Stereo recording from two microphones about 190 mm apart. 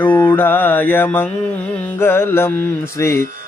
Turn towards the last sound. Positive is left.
turn(degrees=15)  # may be behind; listen again after turning